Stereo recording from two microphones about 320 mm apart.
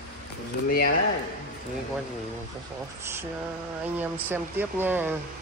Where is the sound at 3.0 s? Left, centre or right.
Centre.